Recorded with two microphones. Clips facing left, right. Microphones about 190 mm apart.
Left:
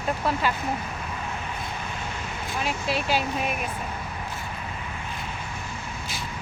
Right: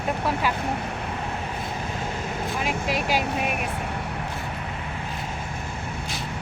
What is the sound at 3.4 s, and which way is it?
Speech, 70° right (ahead or behind).